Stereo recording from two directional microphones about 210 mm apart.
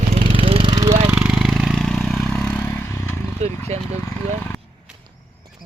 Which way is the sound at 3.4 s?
30° right (ahead or behind).